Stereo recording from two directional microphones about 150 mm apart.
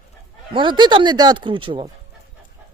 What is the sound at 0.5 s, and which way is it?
Speech, 30° right (ahead or behind).